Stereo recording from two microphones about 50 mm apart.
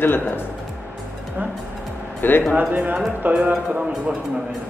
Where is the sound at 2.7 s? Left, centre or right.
Right.